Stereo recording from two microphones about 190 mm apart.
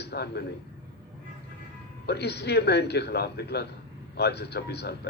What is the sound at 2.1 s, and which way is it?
A man's voice, 60° left (ahead or behind).